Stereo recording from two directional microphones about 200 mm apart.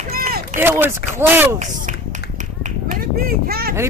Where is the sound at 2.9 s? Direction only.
45° right (ahead or behind).